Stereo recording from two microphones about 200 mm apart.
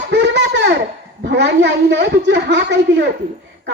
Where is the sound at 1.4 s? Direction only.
60° right (ahead or behind).